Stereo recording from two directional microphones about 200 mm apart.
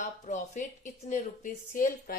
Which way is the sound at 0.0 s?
40° left (ahead or behind).